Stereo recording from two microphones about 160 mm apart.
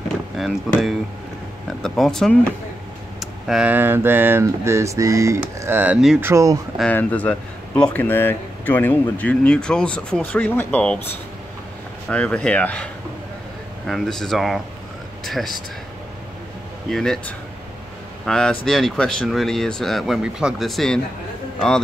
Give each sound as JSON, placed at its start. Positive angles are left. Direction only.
{"t": 0.4, "sound": "speech", "side_deg": 0}
{"t": 6.8, "sound": "speech", "side_deg": 10}
{"t": 12.1, "sound": "speech", "side_deg": 10}
{"t": 16.9, "sound": "speech", "side_deg": 5}
{"t": 18.2, "sound": "speech", "side_deg": 5}